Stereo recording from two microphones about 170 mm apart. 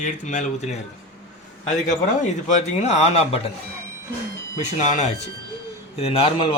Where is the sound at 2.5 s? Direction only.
40° left (ahead or behind).